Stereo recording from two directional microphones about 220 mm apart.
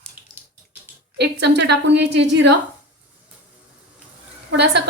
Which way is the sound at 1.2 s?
50° right (ahead or behind).